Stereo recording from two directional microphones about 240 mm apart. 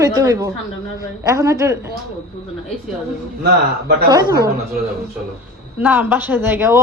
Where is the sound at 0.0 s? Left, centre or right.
Centre.